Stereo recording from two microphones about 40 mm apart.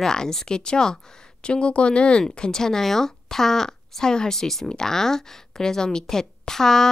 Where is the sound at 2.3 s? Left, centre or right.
Centre.